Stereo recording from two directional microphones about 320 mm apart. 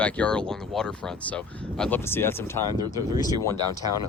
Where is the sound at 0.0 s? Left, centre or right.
Centre.